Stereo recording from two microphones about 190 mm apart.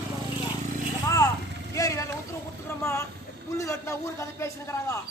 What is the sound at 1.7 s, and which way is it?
Vehicle, 15° left (ahead or behind).